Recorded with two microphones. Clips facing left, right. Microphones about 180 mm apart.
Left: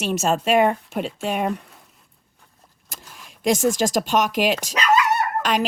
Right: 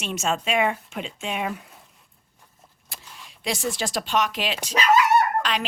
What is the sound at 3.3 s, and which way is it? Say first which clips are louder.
Speech: left 9 dB; 45° left (ahead or behind).